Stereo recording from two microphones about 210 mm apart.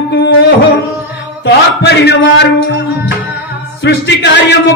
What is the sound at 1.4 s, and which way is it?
Speech, 55° left (ahead or behind).